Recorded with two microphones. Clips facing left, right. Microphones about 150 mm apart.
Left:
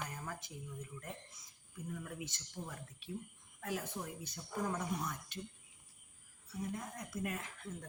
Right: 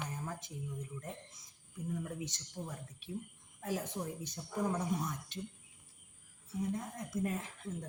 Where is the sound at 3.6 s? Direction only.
20° right (ahead or behind).